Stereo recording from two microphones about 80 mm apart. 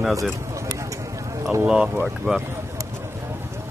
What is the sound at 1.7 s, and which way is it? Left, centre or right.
Speech, centre.